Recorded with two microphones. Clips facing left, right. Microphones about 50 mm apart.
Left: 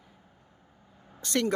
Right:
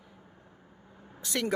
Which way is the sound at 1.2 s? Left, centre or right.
Centre.